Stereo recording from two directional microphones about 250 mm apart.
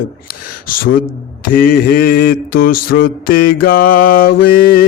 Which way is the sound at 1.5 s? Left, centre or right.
Left.